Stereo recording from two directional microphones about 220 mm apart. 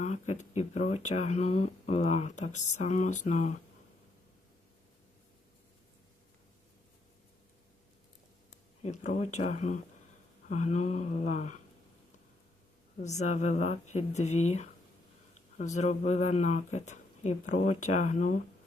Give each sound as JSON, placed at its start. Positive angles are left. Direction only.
{"t": 0.0, "sound": "speech", "side_deg": 35}
{"t": 8.8, "sound": "speech", "side_deg": 30}
{"t": 13.0, "sound": "speech", "side_deg": 30}